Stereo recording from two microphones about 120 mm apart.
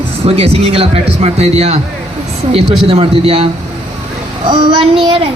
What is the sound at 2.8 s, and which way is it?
Speech, 55° right (ahead or behind).